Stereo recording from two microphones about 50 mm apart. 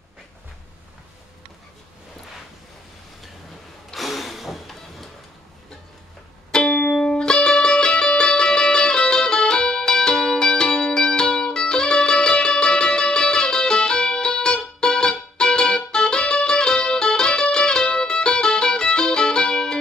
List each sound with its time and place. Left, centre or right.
3.9 s music: centre
6.5 s music: centre